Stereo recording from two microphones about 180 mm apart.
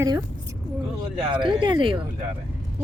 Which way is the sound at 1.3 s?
25° right (ahead or behind).